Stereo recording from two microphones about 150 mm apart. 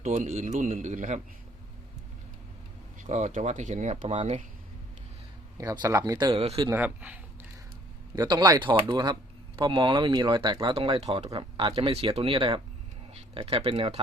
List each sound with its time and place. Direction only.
0.0 s a man's voice: 55° right (ahead or behind)
3.0 s speech: 50° right (ahead or behind)
5.5 s speech: 25° right (ahead or behind)
6.4 s speech: 40° right (ahead or behind)
6.7 s speech: 10° right (ahead or behind)
8.1 s speech: 25° right (ahead or behind)